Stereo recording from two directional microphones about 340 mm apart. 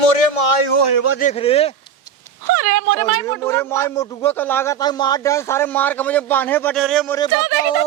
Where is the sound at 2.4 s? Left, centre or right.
Right.